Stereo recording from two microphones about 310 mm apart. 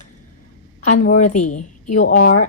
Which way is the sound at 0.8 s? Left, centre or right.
Left.